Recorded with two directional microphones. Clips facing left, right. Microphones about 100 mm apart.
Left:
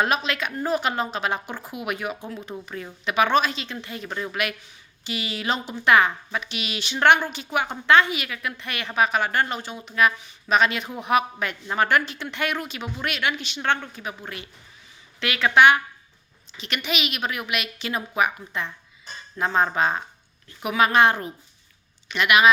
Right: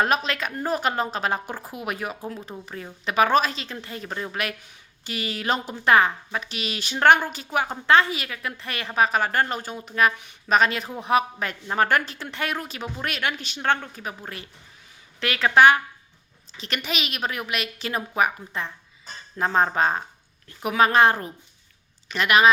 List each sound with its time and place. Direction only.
0.0 s speech: 40° right (ahead or behind)
10.2 s a woman's voice: 55° right (ahead or behind)
10.6 s speech: 40° right (ahead or behind)